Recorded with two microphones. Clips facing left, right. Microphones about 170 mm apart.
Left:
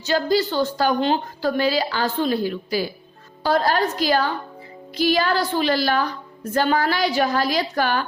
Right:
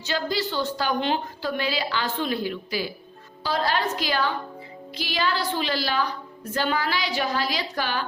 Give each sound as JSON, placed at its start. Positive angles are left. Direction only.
{"t": 0.0, "sound": "a woman's voice", "side_deg": 45}